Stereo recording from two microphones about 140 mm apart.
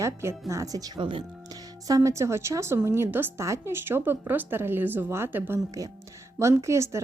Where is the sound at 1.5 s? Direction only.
25° right (ahead or behind).